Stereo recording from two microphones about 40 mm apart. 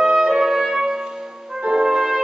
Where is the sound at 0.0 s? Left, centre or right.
Centre.